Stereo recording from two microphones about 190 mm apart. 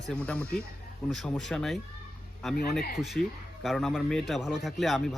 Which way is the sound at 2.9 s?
Centre (ahead or behind).